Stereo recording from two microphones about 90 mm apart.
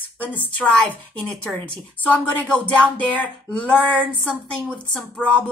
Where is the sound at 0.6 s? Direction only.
15° left (ahead or behind).